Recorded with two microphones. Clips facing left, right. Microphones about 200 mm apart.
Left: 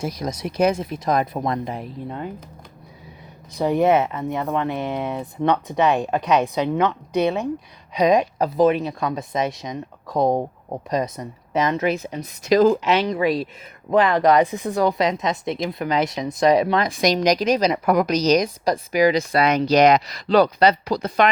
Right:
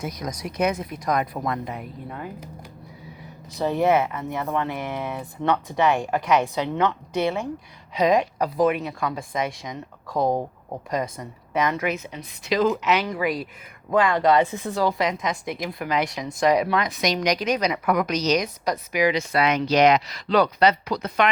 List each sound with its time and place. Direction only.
0.0 s speech: 30° left (ahead or behind)
3.6 s a woman's voice: 15° left (ahead or behind); by 21.2 s 35° left (ahead or behind)